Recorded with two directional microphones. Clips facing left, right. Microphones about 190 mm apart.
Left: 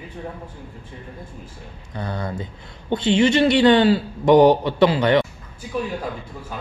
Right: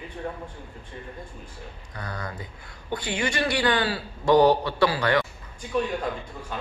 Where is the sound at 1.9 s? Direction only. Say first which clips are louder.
Left 8 dB; 25° left (ahead or behind).